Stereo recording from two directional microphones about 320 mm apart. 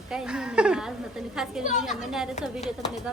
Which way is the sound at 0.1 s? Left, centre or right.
Centre.